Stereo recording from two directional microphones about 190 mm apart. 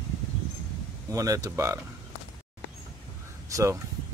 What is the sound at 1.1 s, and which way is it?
Speech, 15° right (ahead or behind).